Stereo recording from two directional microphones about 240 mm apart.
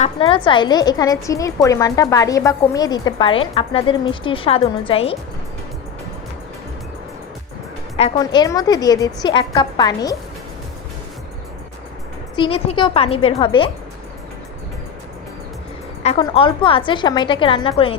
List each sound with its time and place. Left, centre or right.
0.0 s a woman's voice: left
7.9 s a woman's voice: left
12.4 s a woman's voice: left
16.0 s a woman's voice: left